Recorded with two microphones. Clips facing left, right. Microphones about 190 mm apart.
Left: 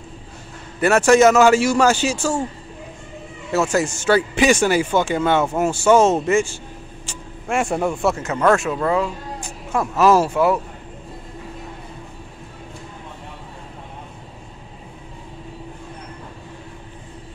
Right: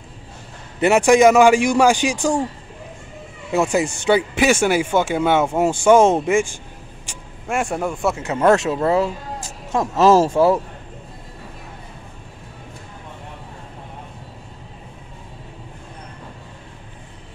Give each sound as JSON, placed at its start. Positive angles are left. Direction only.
{"t": 0.7, "sound": "speech", "side_deg": -15}
{"t": 3.5, "sound": "speech", "side_deg": -15}
{"t": 7.1, "sound": "speech", "side_deg": 0}
{"t": 8.3, "sound": "speech", "side_deg": -25}